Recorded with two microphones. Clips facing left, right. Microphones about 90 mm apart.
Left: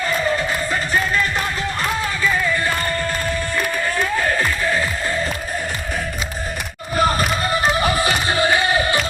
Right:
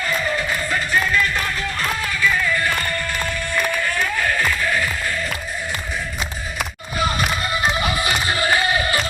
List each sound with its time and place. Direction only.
0.3 s music: 25° left (ahead or behind)
6.9 s music: 40° left (ahead or behind)